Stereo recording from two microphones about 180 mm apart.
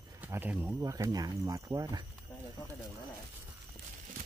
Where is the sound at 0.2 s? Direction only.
10° right (ahead or behind).